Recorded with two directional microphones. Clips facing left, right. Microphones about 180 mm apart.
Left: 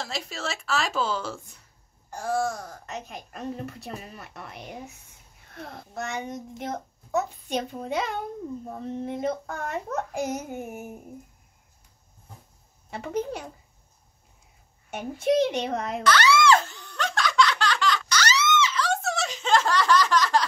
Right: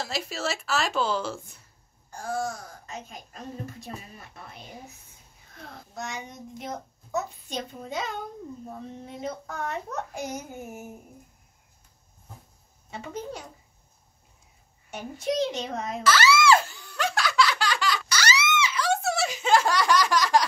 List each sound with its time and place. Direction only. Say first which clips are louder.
0.0 s speech: right 2 dB; 5° right (ahead or behind)
2.9 s a woman's voice: left 3 dB; 65° left (ahead or behind)
5.9 s a child's voice: left 5 dB; 60° left (ahead or behind)
12.9 s a child's voice: left 6 dB; 60° left (ahead or behind)
14.9 s a child's voice: left 5 dB; 55° left (ahead or behind)
16.0 s giggle: left 1 dB; 5° right (ahead or behind)